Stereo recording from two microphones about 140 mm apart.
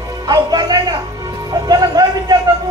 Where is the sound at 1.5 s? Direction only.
30° right (ahead or behind).